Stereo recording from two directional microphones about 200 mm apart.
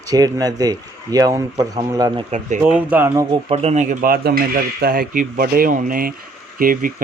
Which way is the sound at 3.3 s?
30° right (ahead or behind).